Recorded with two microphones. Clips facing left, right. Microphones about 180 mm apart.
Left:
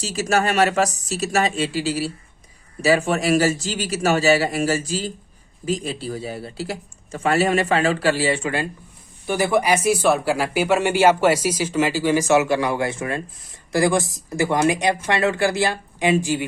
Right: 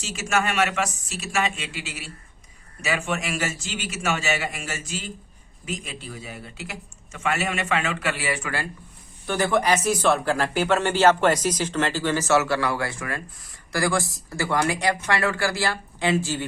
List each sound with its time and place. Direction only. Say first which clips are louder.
0.0 s speech: left 5 dB; 35° left (ahead or behind)
9.2 s speech: left 3 dB; 10° left (ahead or behind)